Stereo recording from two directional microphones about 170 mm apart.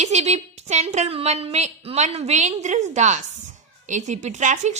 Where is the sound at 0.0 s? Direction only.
40° right (ahead or behind).